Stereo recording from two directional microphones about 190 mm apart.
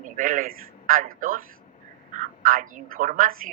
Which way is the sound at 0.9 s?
45° right (ahead or behind).